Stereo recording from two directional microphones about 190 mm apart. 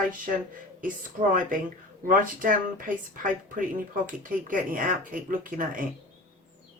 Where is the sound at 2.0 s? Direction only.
45° right (ahead or behind).